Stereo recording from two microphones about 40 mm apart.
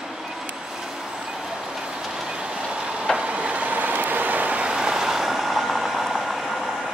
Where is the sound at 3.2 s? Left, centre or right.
Right.